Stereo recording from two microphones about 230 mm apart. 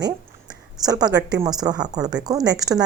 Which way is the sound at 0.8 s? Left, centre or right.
Centre.